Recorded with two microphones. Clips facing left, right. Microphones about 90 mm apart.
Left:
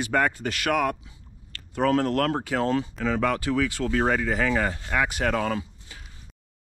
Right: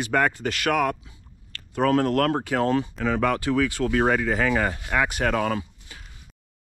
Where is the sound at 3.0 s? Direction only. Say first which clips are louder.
Right 1 dB; 55° right (ahead or behind).